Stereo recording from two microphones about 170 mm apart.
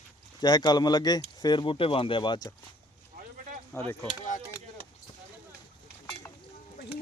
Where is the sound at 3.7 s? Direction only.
10° left (ahead or behind).